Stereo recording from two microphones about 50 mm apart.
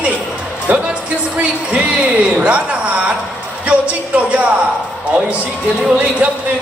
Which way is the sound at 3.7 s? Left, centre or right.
Right.